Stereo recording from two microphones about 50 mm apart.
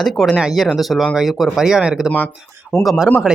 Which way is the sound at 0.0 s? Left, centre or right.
Centre.